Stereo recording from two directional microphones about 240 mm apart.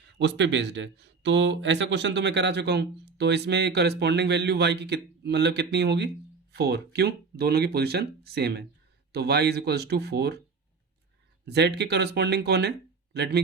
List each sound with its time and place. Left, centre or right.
0.2 s speech: right
11.4 s speech: right